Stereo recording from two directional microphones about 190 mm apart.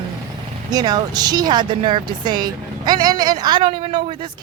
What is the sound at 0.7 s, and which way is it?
Speech, 20° right (ahead or behind).